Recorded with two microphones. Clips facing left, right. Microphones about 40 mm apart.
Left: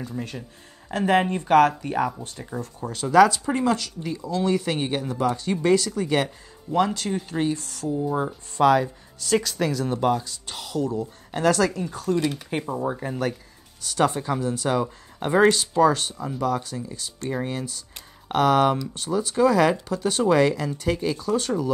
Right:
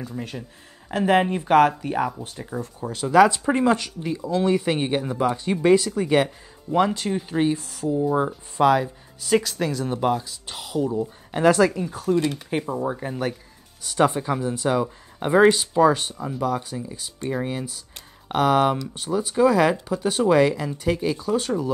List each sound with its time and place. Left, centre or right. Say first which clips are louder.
0.0 s speech: even; centre
3.3 s speech: right 3 dB; right
14.7 s speech: right 3 dB; centre